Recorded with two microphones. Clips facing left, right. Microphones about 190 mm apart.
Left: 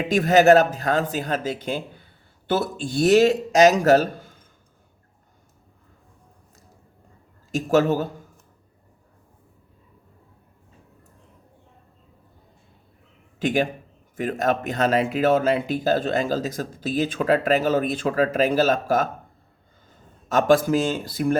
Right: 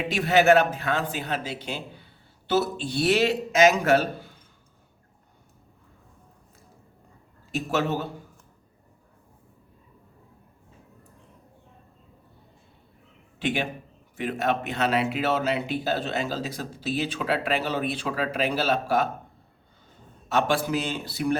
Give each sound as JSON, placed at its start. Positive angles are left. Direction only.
{"t": 0.1, "sound": "speech", "side_deg": 45}
{"t": 7.5, "sound": "speech", "side_deg": 45}
{"t": 13.4, "sound": "a man's voice", "side_deg": 45}
{"t": 20.2, "sound": "speech", "side_deg": 45}